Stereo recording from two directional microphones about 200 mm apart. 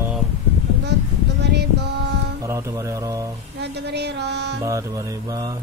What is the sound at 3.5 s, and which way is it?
Music, 55° right (ahead or behind).